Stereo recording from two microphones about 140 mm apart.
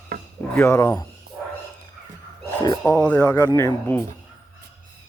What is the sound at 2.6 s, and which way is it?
Speech, 25° left (ahead or behind).